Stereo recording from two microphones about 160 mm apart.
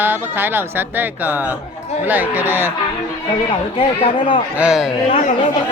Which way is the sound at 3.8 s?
35° left (ahead or behind).